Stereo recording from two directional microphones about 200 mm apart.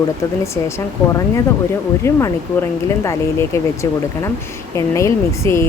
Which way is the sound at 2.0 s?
15° left (ahead or behind).